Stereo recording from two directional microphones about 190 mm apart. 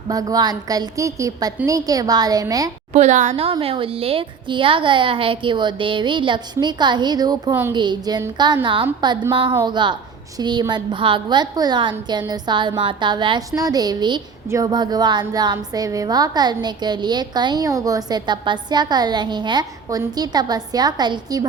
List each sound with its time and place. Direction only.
0.1 s a woman's voice: 20° right (ahead or behind)
2.9 s a woman's voice: 40° right (ahead or behind); by 21.4 s 20° right (ahead or behind)